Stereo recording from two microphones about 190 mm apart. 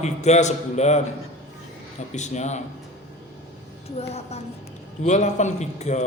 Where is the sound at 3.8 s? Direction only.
35° left (ahead or behind).